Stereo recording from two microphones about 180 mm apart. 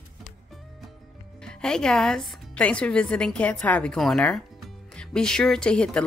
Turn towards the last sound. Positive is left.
turn(degrees=5)  # may be behind; listen again after turning